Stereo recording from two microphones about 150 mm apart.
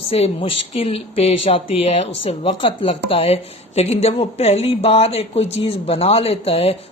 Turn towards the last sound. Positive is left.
turn(degrees=40)  # may be behind; listen again after turning